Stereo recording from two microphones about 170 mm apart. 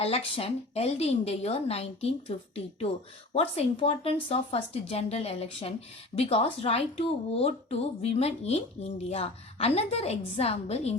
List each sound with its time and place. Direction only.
0.0 s speech: 35° left (ahead or behind)
3.3 s speech: 35° left (ahead or behind)